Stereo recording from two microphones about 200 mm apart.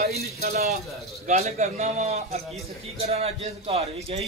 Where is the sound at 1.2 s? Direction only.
35° right (ahead or behind).